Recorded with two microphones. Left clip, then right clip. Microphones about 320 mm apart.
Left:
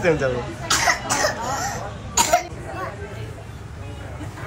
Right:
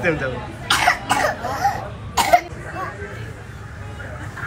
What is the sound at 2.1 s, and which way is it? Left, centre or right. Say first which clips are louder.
Cough: right 3 dB; centre.